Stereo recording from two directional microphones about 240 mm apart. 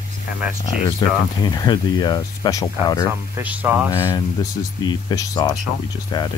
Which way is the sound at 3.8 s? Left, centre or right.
Centre.